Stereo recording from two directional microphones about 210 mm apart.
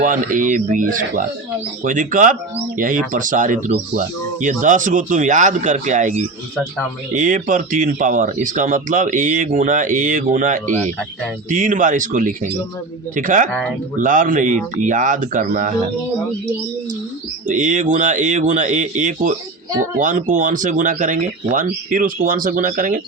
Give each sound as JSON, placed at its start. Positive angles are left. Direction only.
{"t": 0.0, "sound": "speech", "side_deg": -40}
{"t": 17.5, "sound": "speech", "side_deg": -35}